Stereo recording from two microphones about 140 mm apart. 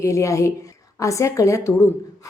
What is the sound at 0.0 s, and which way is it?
A woman's voice, 20° left (ahead or behind).